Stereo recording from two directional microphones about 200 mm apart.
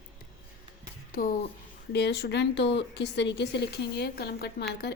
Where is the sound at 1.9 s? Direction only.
55° left (ahead or behind).